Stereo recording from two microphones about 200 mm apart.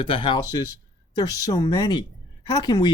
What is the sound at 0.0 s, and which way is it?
Speech, 25° left (ahead or behind).